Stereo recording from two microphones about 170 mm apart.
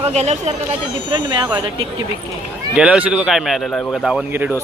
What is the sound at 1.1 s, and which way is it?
Speech, 25° right (ahead or behind).